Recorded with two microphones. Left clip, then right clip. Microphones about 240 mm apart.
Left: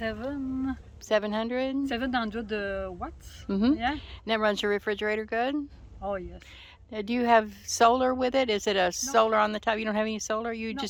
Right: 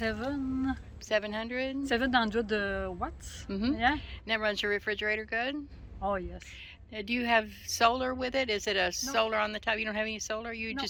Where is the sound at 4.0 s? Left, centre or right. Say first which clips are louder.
Left 4 dB; left.